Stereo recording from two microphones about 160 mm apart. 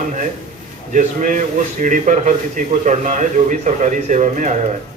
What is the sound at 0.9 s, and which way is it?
A man's voice, 50° right (ahead or behind).